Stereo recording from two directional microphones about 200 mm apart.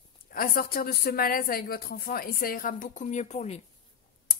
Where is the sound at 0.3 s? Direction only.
45° left (ahead or behind).